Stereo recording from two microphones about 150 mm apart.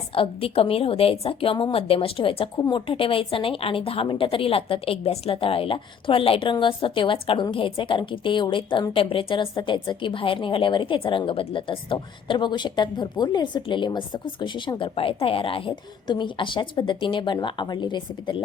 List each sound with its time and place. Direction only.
0.1 s a woman's voice: 40° left (ahead or behind)